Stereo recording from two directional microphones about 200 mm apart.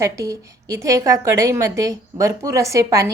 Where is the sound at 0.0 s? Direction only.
15° right (ahead or behind).